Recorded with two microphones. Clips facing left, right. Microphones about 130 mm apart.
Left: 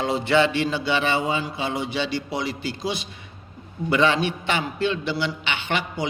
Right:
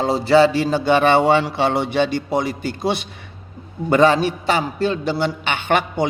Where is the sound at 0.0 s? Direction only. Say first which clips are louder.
Right 6 dB; 35° right (ahead or behind); by 3.1 s 60° right (ahead or behind).